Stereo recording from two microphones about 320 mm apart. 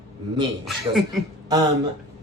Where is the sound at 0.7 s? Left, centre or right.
Centre.